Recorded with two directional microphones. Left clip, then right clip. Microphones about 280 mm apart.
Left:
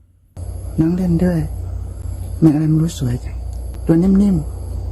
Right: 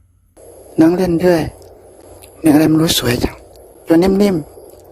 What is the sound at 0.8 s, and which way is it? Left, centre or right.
Speech, right.